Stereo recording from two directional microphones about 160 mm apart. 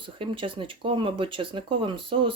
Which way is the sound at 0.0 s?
35° right (ahead or behind).